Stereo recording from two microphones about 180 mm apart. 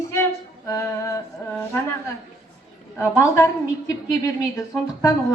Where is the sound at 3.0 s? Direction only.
15° left (ahead or behind).